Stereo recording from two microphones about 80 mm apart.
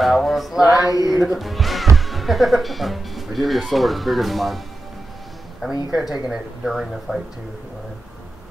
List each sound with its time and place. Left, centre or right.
0.0 s speech: centre
0.7 s speech: left
1.0 s speech: centre
5.9 s speech: centre